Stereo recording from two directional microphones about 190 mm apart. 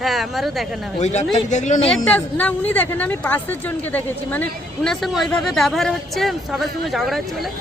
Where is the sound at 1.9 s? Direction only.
5° left (ahead or behind).